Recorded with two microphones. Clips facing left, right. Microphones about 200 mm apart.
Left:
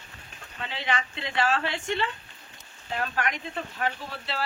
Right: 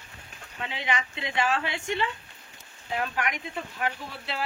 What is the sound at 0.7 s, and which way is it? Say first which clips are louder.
Speech: left 1 dB; 10° right (ahead or behind).